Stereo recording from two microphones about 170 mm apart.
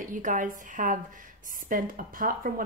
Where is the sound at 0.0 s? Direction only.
50° right (ahead or behind).